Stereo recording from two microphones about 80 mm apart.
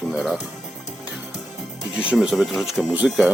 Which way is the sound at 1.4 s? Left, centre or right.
Centre.